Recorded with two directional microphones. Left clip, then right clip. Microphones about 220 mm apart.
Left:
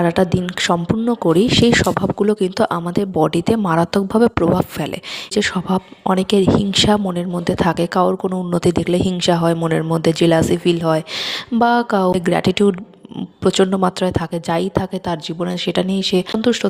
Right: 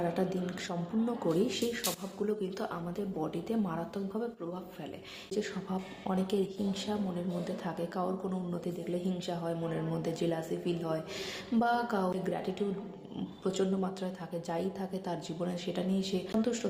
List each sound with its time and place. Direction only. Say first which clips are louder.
0.0 s a woman's voice: left 16 dB; 45° left (ahead or behind)
5.3 s a woman's voice: left 17 dB; 45° left (ahead or behind)